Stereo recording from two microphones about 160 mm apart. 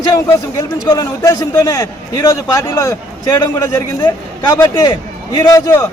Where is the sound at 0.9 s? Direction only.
20° left (ahead or behind).